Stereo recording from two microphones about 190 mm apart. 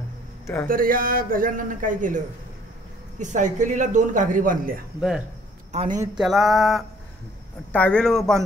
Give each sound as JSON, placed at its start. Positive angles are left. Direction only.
{"t": 0.7, "sound": "a man's voice", "side_deg": -50}
{"t": 6.1, "sound": "speech", "side_deg": 0}